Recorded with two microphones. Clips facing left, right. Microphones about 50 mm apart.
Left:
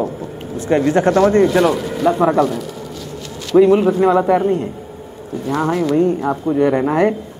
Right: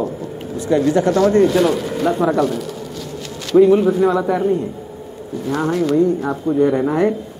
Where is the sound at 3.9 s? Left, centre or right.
Left.